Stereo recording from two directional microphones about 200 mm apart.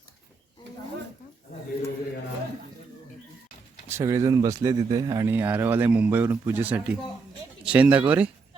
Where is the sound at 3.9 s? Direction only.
15° right (ahead or behind).